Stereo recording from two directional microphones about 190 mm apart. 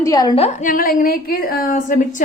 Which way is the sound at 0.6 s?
45° left (ahead or behind).